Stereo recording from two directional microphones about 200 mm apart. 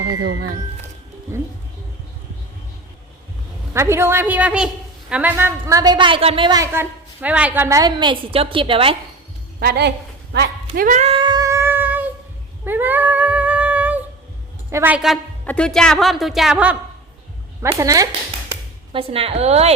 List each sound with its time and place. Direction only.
0.2 s speech: 75° right (ahead or behind)
1.3 s a woman's voice: 15° right (ahead or behind)
3.8 s a woman's voice: 15° right (ahead or behind)
9.6 s a woman's voice: 55° right (ahead or behind)
10.8 s cat: 40° right (ahead or behind); by 12.1 s 10° right (ahead or behind)
12.6 s a sound: 10° right (ahead or behind)
14.7 s a woman's voice: 10° right (ahead or behind)
18.9 s a woman's voice: 30° right (ahead or behind)